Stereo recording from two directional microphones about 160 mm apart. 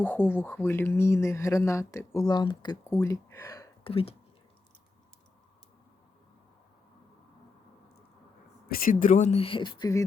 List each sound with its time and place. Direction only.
0.0 s speech: 10° left (ahead or behind); by 2.7 s 30° left (ahead or behind)
2.8 s speech: 15° left (ahead or behind)
3.8 s speech: 35° left (ahead or behind)
8.7 s speech: 60° left (ahead or behind); by 10.0 s 25° left (ahead or behind)